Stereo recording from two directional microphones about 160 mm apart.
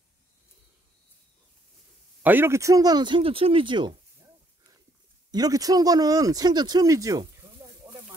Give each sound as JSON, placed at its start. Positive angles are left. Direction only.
{"t": 2.2, "sound": "speech", "side_deg": -15}
{"t": 5.3, "sound": "speech", "side_deg": -25}